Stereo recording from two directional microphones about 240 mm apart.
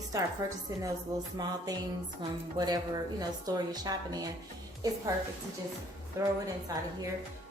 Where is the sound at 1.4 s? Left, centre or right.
Centre.